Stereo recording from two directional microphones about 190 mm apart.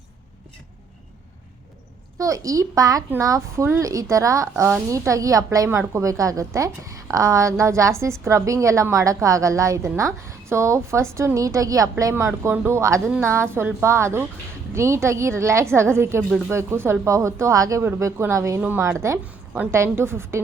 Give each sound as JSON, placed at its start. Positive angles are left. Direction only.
{"t": 2.1, "sound": "a woman's voice", "side_deg": -15}